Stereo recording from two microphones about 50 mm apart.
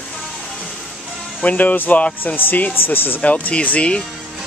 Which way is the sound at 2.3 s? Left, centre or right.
Left.